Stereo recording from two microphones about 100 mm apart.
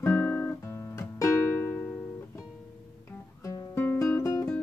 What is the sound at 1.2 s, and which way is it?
Music, 25° left (ahead or behind).